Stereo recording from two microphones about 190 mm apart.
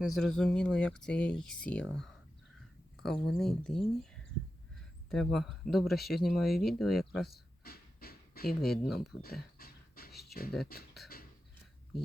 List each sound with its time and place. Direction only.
0.0 s speech: centre (ahead or behind)
5.0 s speech: centre (ahead or behind)
7.3 s a sound: 55° left (ahead or behind)
8.4 s speech: centre (ahead or behind)
9.2 s dog: 50° left (ahead or behind)
10.1 s beatboxing: centre (ahead or behind)
10.7 s speech: 55° left (ahead or behind)